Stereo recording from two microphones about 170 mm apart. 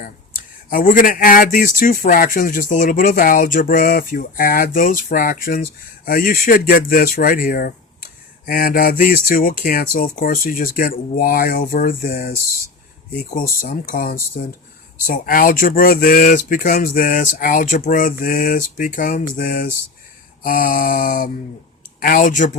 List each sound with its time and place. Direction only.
0.7 s speech: 55° left (ahead or behind)